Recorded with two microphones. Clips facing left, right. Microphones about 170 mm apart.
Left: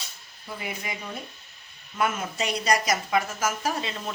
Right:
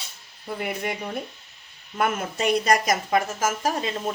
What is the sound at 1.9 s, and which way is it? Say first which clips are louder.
Speech: right 2 dB; 55° right (ahead or behind).